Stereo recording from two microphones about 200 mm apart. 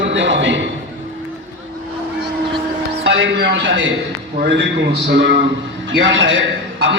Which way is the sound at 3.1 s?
65° right (ahead or behind).